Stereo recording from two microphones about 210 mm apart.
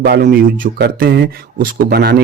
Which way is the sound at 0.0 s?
50° right (ahead or behind).